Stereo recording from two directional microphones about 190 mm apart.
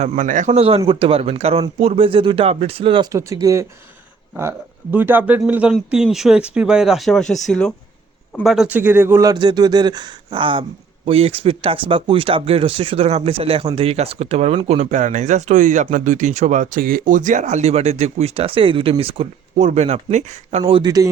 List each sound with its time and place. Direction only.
0.0 s speech: 45° right (ahead or behind); by 3.1 s 25° right (ahead or behind)
3.1 s speech: 15° right (ahead or behind)